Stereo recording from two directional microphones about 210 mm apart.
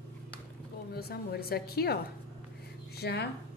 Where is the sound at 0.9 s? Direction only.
50° left (ahead or behind).